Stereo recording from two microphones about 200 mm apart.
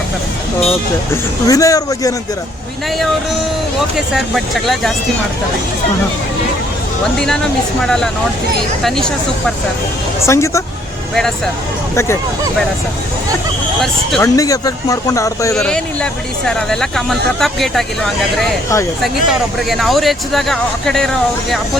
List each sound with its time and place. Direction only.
1.1 s speech: 15° left (ahead or behind)
3.9 s speech: centre (ahead or behind)
7.0 s speech: 5° left (ahead or behind)
10.2 s speech: 15° left (ahead or behind)
14.2 s speech: 15° left (ahead or behind)
15.5 s speech: 5° left (ahead or behind)